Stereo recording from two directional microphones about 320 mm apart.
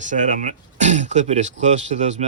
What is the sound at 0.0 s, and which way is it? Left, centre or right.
Speech, right.